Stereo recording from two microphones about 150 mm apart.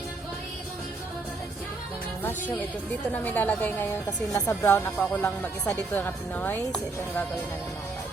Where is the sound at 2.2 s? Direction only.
15° left (ahead or behind).